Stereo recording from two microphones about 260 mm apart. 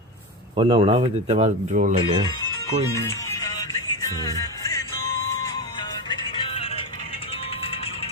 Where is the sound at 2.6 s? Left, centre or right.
Centre.